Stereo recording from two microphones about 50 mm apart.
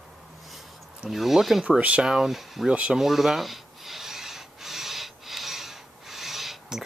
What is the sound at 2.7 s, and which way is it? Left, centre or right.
Speech, right.